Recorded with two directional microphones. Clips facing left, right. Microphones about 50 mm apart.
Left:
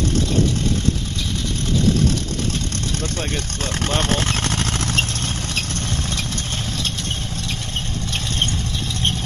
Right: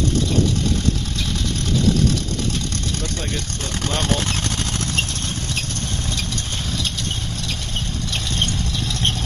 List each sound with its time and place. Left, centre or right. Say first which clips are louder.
3.8 s speech: left 1 dB; left
4.4 s vehicle: left 2 dB; left